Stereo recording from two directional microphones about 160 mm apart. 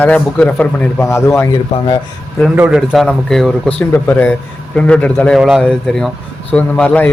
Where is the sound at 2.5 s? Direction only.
5° right (ahead or behind).